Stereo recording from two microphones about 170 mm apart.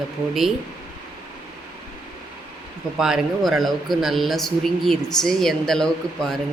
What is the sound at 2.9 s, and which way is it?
Speech, 5° right (ahead or behind).